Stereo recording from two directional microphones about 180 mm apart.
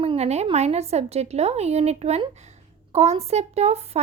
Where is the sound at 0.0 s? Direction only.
35° right (ahead or behind).